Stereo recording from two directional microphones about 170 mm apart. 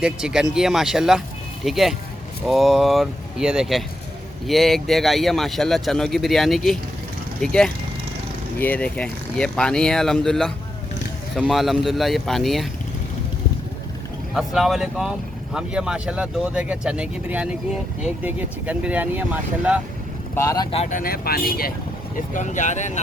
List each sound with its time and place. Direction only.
0.0 s speech: 5° right (ahead or behind)
14.3 s speech: centre (ahead or behind)
20.3 s speech: 20° left (ahead or behind)
20.7 s speech: 40° left (ahead or behind); by 21.7 s 60° left (ahead or behind)
22.1 s speech: 45° left (ahead or behind)